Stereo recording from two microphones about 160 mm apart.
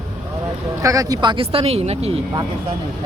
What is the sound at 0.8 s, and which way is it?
Speech, 20° right (ahead or behind).